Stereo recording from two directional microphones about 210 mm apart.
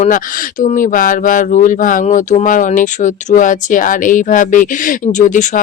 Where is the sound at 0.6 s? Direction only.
35° left (ahead or behind).